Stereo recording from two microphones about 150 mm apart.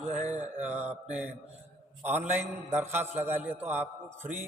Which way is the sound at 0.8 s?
45° right (ahead or behind).